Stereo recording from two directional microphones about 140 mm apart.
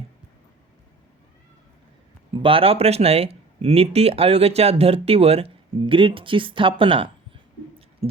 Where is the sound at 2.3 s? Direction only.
40° right (ahead or behind).